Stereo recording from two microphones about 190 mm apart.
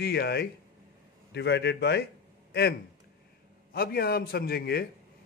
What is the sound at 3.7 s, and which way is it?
A man's voice, 55° left (ahead or behind).